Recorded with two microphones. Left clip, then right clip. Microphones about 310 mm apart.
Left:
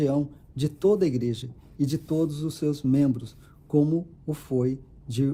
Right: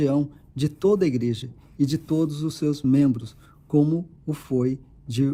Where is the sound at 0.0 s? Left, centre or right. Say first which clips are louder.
Right 2 dB; right.